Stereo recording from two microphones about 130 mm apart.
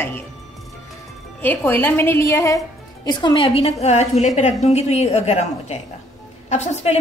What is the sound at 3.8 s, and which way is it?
A woman's voice, 55° left (ahead or behind).